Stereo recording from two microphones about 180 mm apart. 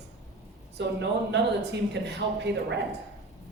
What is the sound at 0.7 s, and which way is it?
A man's voice, 70° right (ahead or behind).